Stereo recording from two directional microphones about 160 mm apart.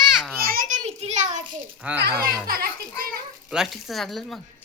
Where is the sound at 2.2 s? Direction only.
70° right (ahead or behind).